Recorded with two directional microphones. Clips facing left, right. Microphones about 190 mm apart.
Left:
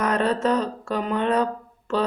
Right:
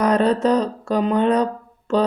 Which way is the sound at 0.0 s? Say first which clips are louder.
Right 5 dB; 35° right (ahead or behind).